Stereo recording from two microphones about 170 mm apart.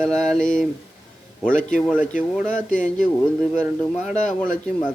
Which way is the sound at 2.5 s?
50° left (ahead or behind).